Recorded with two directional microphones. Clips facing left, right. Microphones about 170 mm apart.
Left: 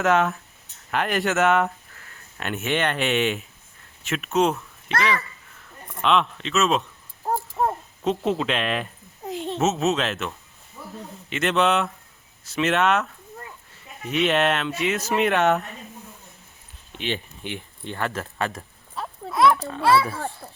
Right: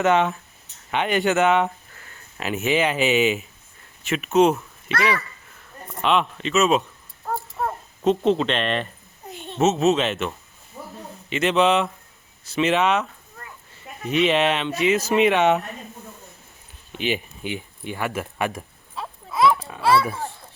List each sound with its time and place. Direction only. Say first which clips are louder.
0.0 s speech: right 1 dB; centre (ahead or behind)
6.0 s speech: even; 5° right (ahead or behind)
7.6 s a sound: left 4 dB; 30° left (ahead or behind)
8.0 s speech: right 4 dB; 5° left (ahead or behind)
9.2 s a sound: left 8 dB; 90° left
9.6 s speech: right 4 dB; centre (ahead or behind)
10.8 s a sound: right 2 dB; 40° right (ahead or behind)
11.3 s speech: right 2 dB; centre (ahead or behind)
17.0 s speech: right 4 dB; 10° right (ahead or behind)
18.9 s clip-clop: even; centre (ahead or behind)
19.6 s speech: even; centre (ahead or behind)